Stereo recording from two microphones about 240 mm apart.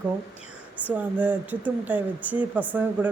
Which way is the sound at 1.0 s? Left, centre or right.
Centre.